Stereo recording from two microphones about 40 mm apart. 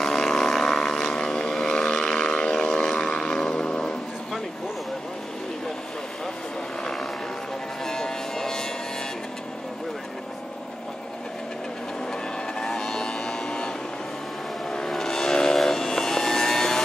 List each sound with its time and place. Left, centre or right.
0.0 s vehicle: centre
6.8 s vehicle: centre
7.8 s music: centre
12.1 s vehicle: centre
14.9 s vehicle: centre